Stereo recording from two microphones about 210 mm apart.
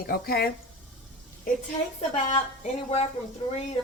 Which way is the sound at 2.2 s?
30° left (ahead or behind).